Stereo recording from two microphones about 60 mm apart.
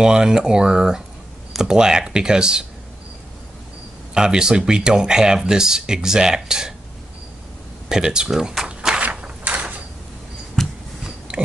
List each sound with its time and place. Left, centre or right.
0.0 s speech: centre
4.1 s speech: centre
7.9 s speech: centre
9.0 s mechanisms: centre
10.5 s a sound: centre